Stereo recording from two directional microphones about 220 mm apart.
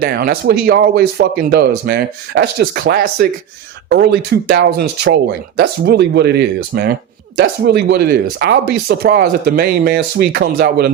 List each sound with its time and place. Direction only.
0.0 s speech: 45° right (ahead or behind)